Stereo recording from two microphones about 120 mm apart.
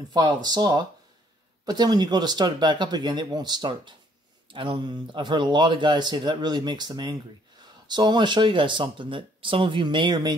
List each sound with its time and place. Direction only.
0.1 s speech: 35° right (ahead or behind)